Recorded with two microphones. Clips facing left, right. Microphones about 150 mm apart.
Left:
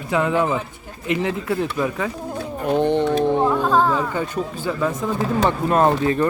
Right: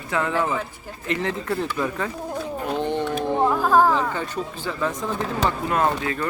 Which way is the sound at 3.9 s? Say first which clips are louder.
Left 2 dB; 10° left (ahead or behind).